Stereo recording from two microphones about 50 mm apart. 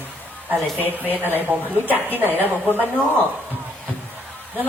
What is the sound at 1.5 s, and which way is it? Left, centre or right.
A woman's voice, right.